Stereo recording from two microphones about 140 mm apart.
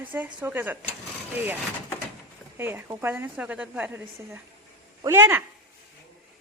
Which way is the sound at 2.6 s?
15° right (ahead or behind).